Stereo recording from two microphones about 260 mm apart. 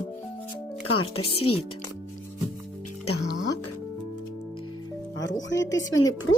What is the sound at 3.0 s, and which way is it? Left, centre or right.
Music, left.